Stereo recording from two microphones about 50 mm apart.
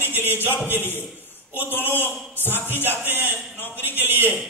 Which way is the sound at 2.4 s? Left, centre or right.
Left.